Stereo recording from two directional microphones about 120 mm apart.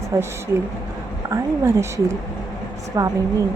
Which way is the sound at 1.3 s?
25° right (ahead or behind).